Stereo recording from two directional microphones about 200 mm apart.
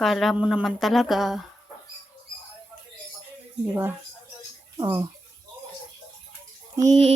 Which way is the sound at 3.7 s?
10° right (ahead or behind).